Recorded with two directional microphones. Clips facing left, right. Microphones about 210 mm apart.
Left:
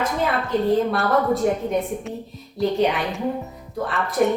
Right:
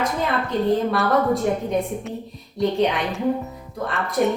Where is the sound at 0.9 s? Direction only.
Centre (ahead or behind).